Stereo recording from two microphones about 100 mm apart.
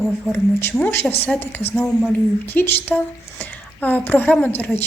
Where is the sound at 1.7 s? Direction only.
5° left (ahead or behind).